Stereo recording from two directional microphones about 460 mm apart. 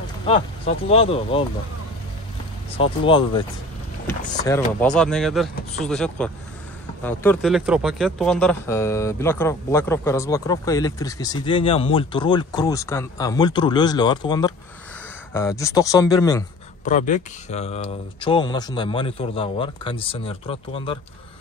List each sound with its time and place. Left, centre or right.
0.8 s speech: centre
2.8 s speech: centre
4.5 s speech: centre